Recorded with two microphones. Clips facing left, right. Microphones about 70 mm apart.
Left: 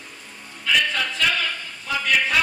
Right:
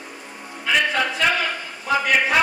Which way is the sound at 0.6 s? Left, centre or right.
Right.